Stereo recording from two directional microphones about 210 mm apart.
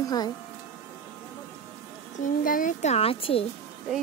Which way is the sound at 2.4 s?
40° left (ahead or behind).